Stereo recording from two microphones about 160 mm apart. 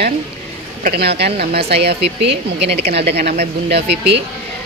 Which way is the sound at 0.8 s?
90° right.